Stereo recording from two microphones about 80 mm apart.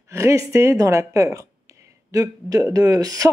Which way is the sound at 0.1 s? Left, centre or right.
Right.